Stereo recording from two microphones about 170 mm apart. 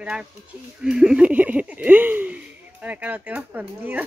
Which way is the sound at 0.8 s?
5° right (ahead or behind).